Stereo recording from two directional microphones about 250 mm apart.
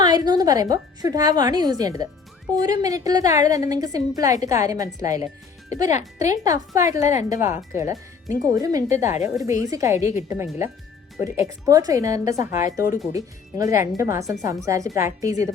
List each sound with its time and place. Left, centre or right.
0.0 s a woman's voice: centre
5.9 s speech: left
6.2 s a woman's voice: centre